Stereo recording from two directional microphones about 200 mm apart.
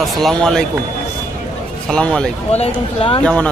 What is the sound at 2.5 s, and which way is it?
Speech, 30° left (ahead or behind).